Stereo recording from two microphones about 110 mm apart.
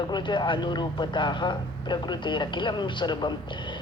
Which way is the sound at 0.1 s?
45° left (ahead or behind).